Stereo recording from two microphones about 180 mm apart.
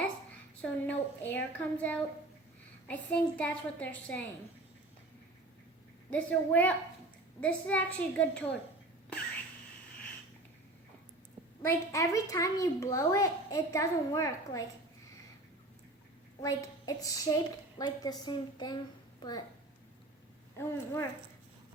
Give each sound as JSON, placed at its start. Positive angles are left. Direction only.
{"t": 0.6, "sound": "a woman's voice", "side_deg": 10}
{"t": 6.1, "sound": "a child's voice", "side_deg": 10}
{"t": 11.6, "sound": "a child's voice", "side_deg": 15}
{"t": 16.4, "sound": "a woman's voice", "side_deg": 20}
{"t": 20.6, "sound": "a child's voice", "side_deg": 15}